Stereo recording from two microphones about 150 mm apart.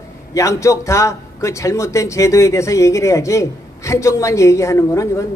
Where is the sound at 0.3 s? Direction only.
20° left (ahead or behind).